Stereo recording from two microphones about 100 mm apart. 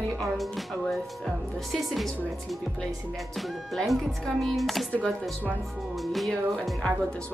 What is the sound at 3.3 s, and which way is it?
Speech, centre (ahead or behind).